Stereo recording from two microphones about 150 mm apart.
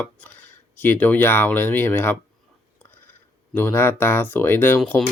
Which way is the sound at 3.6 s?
15° left (ahead or behind).